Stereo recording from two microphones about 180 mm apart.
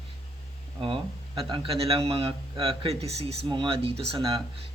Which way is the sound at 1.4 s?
30° right (ahead or behind).